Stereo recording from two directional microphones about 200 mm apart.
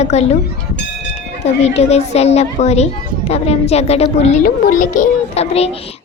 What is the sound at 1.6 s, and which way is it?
A child's voice, 30° left (ahead or behind).